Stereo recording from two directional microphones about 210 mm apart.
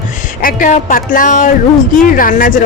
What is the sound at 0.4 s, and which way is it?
A woman's voice, 40° left (ahead or behind).